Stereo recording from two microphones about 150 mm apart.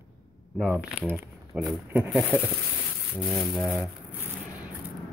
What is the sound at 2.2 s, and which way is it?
Speech, 10° left (ahead or behind).